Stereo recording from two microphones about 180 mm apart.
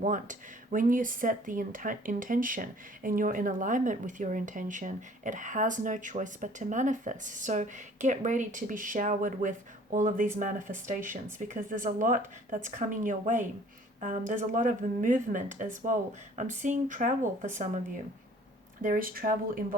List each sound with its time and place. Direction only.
0.0 s speech: 45° right (ahead or behind)
18.8 s speech: 50° right (ahead or behind)